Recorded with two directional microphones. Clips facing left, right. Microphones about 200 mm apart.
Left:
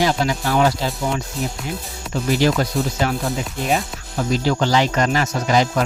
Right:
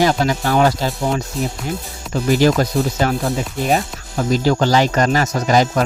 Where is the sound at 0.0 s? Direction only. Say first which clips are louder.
Right 3 dB; 45° right (ahead or behind).